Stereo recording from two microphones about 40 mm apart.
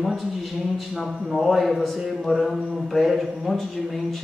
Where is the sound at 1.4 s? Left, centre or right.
Centre.